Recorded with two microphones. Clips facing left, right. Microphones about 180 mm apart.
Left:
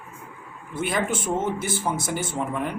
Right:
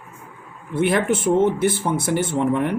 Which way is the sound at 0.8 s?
55° right (ahead or behind).